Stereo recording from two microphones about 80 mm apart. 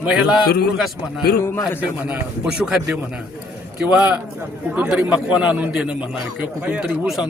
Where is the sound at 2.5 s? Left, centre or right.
Centre.